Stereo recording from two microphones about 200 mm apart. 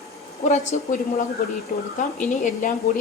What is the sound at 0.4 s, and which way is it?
Speech, 35° left (ahead or behind).